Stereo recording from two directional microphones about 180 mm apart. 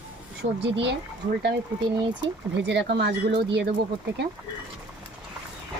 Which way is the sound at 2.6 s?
75° right (ahead or behind).